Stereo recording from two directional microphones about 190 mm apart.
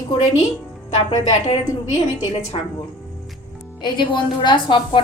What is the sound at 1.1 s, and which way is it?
Speech, 35° left (ahead or behind).